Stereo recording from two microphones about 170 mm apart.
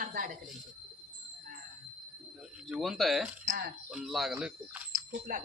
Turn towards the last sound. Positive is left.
turn(degrees=-55)  # may be behind; listen again after turning